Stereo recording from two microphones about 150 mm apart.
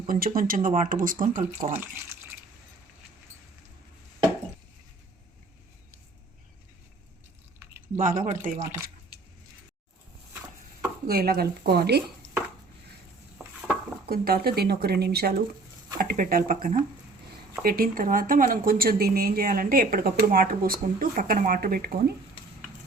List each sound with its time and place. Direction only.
0.1 s speech: 75° right (ahead or behind)
7.9 s speech: 60° right (ahead or behind)
11.0 s speech: 90° right
14.1 s speech: 90° right
16.0 s speech: 75° right (ahead or behind); by 22.1 s 90° right